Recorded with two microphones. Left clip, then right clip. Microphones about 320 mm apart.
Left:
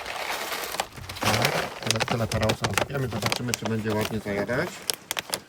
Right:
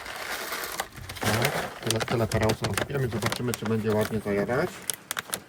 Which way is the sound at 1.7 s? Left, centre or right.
Left.